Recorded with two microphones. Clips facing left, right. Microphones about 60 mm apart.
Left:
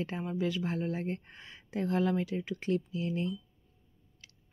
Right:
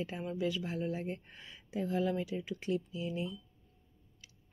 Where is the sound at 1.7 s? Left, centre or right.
Left.